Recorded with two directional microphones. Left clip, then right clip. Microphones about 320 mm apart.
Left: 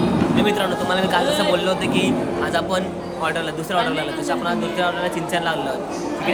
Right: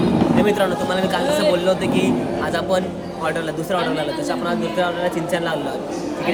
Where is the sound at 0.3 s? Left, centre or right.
Centre.